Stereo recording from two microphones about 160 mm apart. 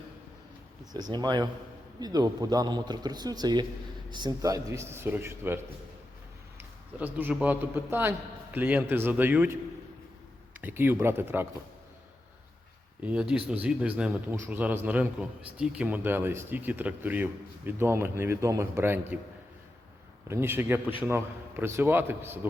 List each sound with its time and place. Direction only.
1.1 s a man's voice: 25° right (ahead or behind)
6.6 s a man's voice: 10° right (ahead or behind)
10.6 s a man's voice: 15° right (ahead or behind)
13.0 s a man's voice: 5° right (ahead or behind)
20.2 s a man's voice: 15° right (ahead or behind)